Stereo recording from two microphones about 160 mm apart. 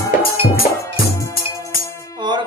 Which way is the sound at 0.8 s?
20° left (ahead or behind).